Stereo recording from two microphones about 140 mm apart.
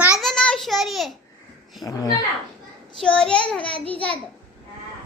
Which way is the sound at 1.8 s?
25° left (ahead or behind).